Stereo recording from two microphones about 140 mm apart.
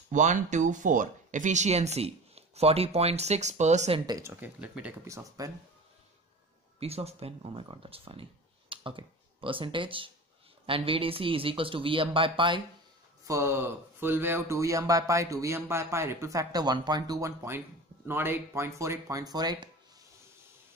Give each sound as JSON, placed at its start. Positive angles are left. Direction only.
{"t": 0.1, "sound": "speech", "side_deg": -60}
{"t": 4.2, "sound": "speech", "side_deg": -15}
{"t": 5.0, "sound": "speech", "side_deg": -20}
{"t": 6.8, "sound": "speech", "side_deg": -45}
{"t": 13.3, "sound": "speech", "side_deg": -20}